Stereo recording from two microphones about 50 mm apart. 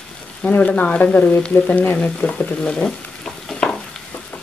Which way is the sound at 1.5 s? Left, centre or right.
Left.